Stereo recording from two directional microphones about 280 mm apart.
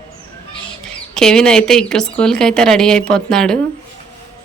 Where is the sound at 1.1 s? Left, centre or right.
Centre.